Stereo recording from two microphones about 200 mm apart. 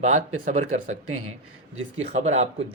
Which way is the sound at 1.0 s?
90° right.